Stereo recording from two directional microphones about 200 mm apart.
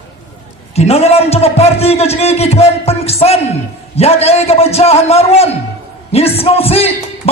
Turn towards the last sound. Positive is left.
turn(degrees=30)  # may be behind; listen again after turning